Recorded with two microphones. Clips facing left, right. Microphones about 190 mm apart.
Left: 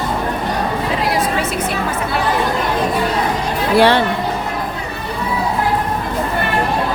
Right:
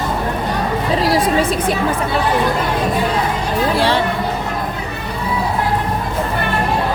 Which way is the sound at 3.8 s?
60° left (ahead or behind).